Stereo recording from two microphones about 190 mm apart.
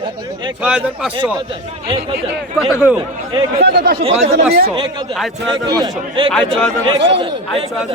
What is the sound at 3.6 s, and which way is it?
Speech, 55° right (ahead or behind).